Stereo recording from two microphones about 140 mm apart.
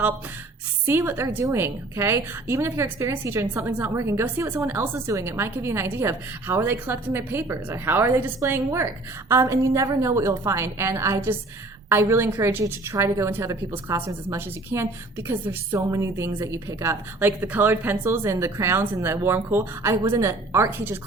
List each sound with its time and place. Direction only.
0.9 s a woman's voice: 15° right (ahead or behind)